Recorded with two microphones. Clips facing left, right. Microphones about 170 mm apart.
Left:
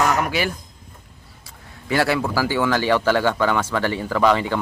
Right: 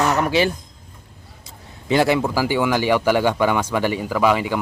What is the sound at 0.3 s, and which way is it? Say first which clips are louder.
Speech: right 5 dB; 25° right (ahead or behind).